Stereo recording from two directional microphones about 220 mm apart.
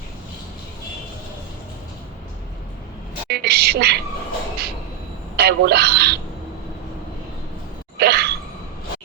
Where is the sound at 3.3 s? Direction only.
45° right (ahead or behind).